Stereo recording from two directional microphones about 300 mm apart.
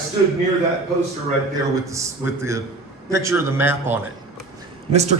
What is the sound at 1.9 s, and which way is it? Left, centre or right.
A man's voice, centre.